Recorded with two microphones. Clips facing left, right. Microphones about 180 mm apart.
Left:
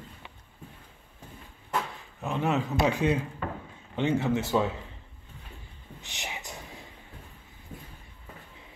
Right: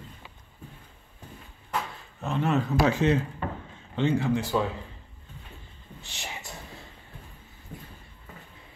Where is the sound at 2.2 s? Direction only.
15° left (ahead or behind).